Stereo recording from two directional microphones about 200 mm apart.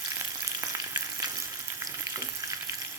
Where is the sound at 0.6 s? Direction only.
15° right (ahead or behind).